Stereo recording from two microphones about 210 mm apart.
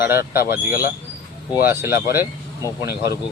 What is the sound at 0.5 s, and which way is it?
Speech, 10° right (ahead or behind).